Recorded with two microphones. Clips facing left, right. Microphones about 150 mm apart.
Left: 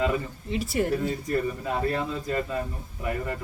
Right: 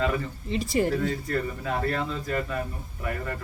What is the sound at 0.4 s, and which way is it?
Speech, centre (ahead or behind).